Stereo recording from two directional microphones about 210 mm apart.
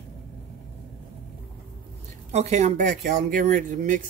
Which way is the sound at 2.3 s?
30° right (ahead or behind).